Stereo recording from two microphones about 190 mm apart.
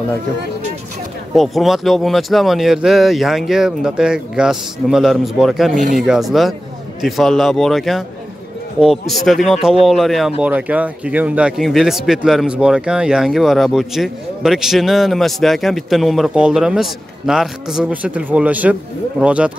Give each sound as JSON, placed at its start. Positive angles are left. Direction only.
{"t": 1.3, "sound": "speech", "side_deg": 0}
{"t": 5.7, "sound": "speech", "side_deg": -40}
{"t": 5.9, "sound": "speech", "side_deg": 0}